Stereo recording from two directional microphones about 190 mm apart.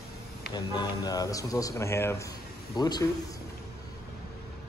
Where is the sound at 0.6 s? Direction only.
20° left (ahead or behind).